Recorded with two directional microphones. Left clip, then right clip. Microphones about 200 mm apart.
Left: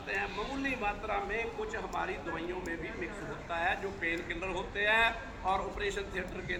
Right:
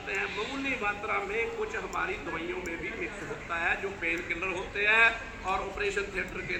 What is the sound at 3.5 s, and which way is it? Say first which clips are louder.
A man's voice: right 3 dB; 40° left (ahead or behind).